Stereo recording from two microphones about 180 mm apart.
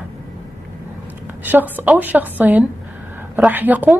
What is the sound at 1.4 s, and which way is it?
A woman's voice, 10° right (ahead or behind).